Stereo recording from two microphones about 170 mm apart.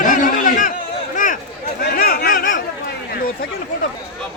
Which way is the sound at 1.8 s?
60° left (ahead or behind).